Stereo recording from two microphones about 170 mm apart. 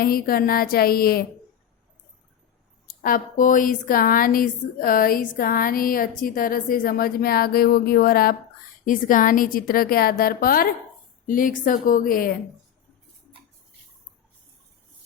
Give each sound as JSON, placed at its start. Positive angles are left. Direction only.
{"t": 0.0, "sound": "a woman's voice", "side_deg": 60}
{"t": 2.8, "sound": "a woman's voice", "side_deg": 55}